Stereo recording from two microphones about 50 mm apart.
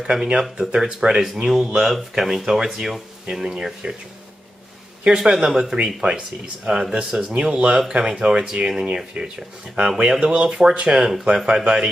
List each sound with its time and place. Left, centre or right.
0.0 s speech: centre
3.3 s speech: centre
5.1 s speech: centre
6.0 s speech: right